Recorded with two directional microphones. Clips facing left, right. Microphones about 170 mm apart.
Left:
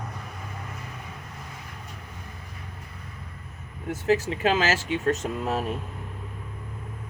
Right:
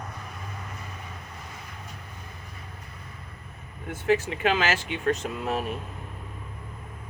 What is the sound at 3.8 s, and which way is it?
Speech, 40° left (ahead or behind).